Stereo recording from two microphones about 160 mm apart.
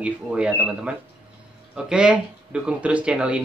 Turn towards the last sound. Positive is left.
turn(degrees=-5)  # may be behind; listen again after turning